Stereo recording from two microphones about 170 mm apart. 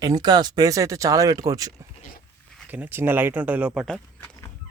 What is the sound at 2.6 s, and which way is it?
Speech, 10° right (ahead or behind).